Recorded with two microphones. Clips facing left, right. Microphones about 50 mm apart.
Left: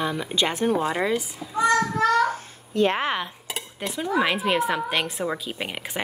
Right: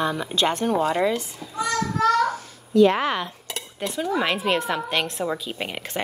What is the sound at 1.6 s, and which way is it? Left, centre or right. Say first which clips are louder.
Babbling: left 3 dB; left.